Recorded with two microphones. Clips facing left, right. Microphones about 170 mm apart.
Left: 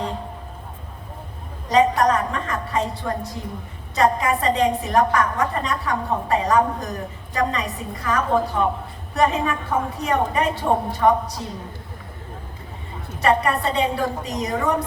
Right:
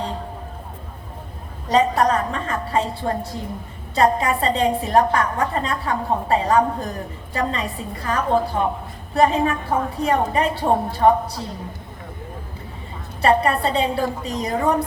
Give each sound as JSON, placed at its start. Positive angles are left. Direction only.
{"t": 1.7, "sound": "a woman's voice", "side_deg": -30}
{"t": 13.2, "sound": "a woman's voice", "side_deg": -30}